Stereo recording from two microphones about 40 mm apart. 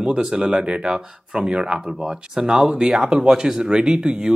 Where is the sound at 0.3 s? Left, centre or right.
Centre.